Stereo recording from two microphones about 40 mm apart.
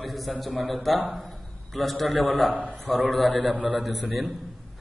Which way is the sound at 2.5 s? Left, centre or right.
Right.